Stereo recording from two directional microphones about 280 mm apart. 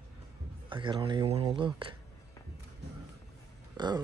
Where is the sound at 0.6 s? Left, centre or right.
Centre.